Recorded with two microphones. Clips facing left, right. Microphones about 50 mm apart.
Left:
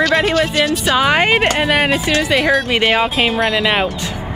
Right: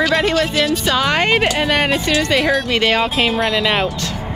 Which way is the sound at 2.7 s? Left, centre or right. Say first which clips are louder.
Left 1 dB; centre.